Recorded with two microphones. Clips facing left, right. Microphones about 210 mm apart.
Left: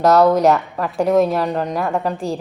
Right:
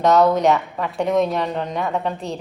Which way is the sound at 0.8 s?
Centre (ahead or behind).